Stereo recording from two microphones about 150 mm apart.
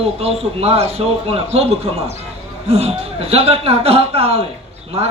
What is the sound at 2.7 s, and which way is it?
A man's voice, 45° right (ahead or behind).